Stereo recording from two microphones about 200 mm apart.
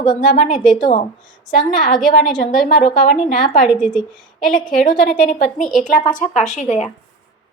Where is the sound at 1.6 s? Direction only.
40° left (ahead or behind).